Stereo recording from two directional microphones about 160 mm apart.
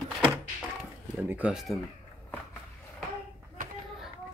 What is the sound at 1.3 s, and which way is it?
Speech, 5° right (ahead or behind).